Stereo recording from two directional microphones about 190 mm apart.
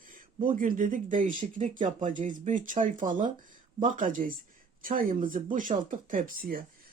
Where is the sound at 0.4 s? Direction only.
45° right (ahead or behind).